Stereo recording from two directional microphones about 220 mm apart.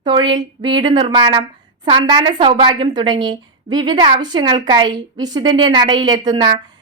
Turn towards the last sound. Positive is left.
turn(degrees=-20)  # may be behind; listen again after turning